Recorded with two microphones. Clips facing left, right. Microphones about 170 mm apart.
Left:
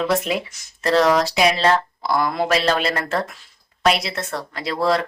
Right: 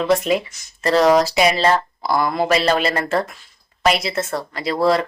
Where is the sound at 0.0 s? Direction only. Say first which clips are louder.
Right 3 dB; centre (ahead or behind).